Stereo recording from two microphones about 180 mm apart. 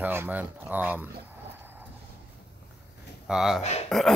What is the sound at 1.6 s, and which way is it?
Vehicle, 10° right (ahead or behind).